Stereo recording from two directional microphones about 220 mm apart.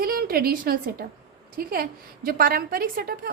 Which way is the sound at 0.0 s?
40° right (ahead or behind).